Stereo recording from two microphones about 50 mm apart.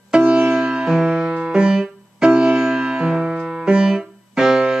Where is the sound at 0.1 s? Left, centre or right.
Right.